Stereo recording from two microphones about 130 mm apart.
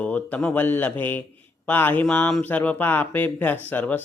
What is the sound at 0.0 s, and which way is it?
Speech, 10° left (ahead or behind).